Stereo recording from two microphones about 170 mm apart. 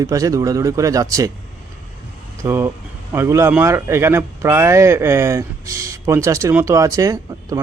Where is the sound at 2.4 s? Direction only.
15° right (ahead or behind).